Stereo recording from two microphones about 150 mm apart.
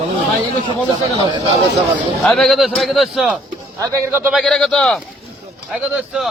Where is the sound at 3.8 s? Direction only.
20° right (ahead or behind).